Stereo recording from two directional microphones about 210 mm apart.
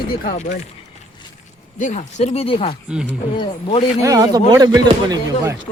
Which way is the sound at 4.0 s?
15° right (ahead or behind).